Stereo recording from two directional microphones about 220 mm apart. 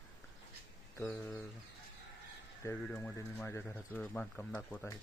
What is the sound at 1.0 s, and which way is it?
Speech, 5° left (ahead or behind).